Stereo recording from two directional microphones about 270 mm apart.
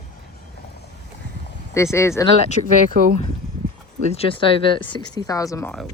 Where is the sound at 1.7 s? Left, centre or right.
Centre.